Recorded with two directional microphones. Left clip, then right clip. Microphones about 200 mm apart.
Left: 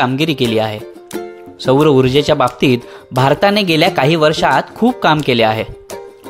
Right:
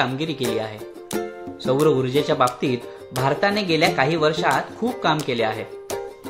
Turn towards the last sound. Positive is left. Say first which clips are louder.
# left 10 dB
turn(degrees=50)  # may be behind; listen again after turning